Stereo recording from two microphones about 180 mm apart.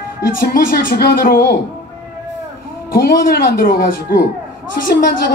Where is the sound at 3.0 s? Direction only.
55° left (ahead or behind).